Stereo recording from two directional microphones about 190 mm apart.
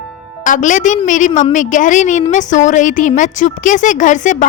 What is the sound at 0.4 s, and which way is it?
A woman's voice, 40° left (ahead or behind).